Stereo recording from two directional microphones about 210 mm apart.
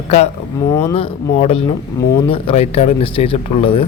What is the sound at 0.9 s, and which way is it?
A man's voice, 25° left (ahead or behind).